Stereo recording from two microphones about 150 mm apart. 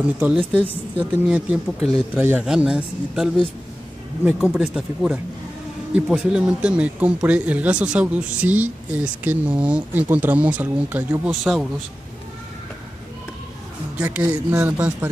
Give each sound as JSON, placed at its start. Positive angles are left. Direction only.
{"t": 0.2, "sound": "speech", "side_deg": -5}
{"t": 13.9, "sound": "speech", "side_deg": -10}